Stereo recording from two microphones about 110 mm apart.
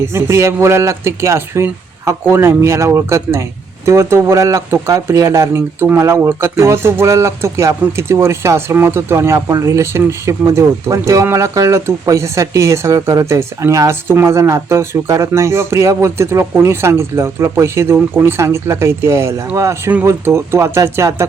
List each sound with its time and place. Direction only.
0.0 s speech: 25° right (ahead or behind)